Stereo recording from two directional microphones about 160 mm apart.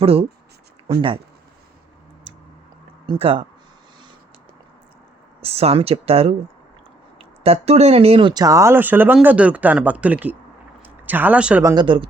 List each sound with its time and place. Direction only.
0.0 s speech: 35° right (ahead or behind)
3.1 s speech: 35° right (ahead or behind)
5.4 s speech: 40° right (ahead or behind)
8.3 s speech: 25° right (ahead or behind); by 11.6 s 10° right (ahead or behind)
11.6 s speech: 25° right (ahead or behind)